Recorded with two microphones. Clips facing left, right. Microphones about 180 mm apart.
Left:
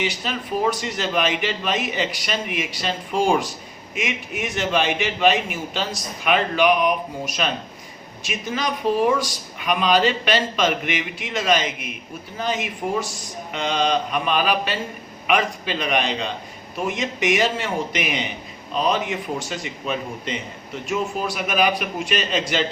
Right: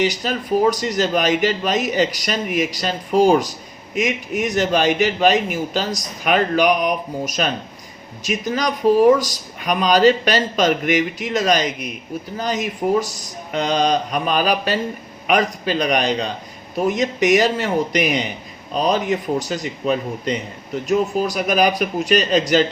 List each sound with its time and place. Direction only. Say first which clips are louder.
0.0 s speech: right 6 dB; 40° right (ahead or behind)